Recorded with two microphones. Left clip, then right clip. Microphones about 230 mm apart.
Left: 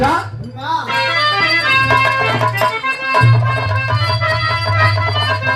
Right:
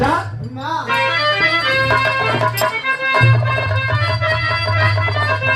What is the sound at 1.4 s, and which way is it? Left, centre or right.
Music, left.